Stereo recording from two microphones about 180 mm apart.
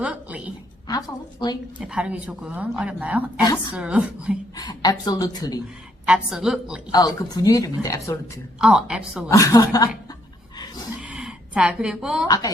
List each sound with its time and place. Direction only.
0.0 s a sound: 5° right (ahead or behind)
0.9 s speech: 20° left (ahead or behind)
1.8 s a woman's voice: 5° right (ahead or behind)
4.5 s speech: 20° left (ahead or behind)
6.1 s a woman's voice: 5° right (ahead or behind)
6.9 s speech: 20° left (ahead or behind)
8.6 s a woman's voice: 5° right (ahead or behind)
9.3 s speech: 20° left (ahead or behind)
11.0 s a sound: 5° right (ahead or behind)